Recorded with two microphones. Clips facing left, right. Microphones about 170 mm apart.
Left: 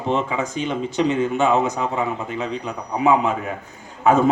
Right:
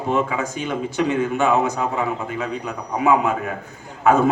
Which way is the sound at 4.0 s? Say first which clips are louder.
Even; 15° left (ahead or behind).